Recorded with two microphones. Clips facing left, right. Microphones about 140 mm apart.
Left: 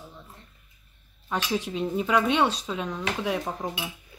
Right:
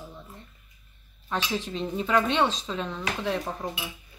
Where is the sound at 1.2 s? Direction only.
10° left (ahead or behind).